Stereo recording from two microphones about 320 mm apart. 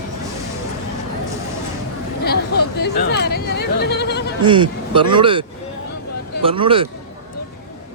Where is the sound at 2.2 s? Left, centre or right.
Left.